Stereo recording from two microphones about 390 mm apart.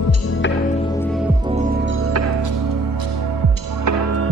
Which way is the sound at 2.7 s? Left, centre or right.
Right.